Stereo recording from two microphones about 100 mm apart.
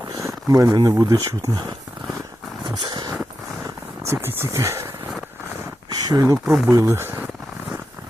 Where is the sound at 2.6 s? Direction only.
45° right (ahead or behind).